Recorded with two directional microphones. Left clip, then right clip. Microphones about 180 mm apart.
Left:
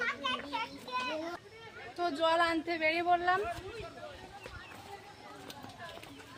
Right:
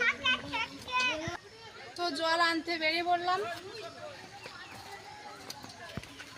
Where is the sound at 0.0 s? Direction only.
30° left (ahead or behind).